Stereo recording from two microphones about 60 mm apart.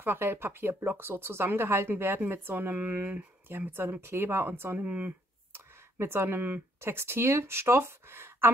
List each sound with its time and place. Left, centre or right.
0.0 s speech: right
4.7 s speech: right
5.5 s speech: right